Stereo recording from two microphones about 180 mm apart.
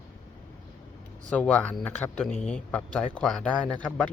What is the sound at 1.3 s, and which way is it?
Speech, 5° left (ahead or behind).